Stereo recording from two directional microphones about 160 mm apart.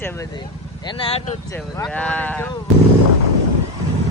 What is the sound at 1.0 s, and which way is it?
Speech, 35° left (ahead or behind).